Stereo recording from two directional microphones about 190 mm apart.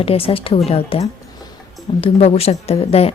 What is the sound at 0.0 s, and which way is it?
A woman's voice, 30° left (ahead or behind).